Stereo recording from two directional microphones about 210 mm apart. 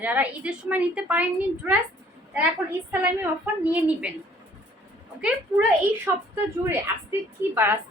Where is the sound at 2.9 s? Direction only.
10° right (ahead or behind).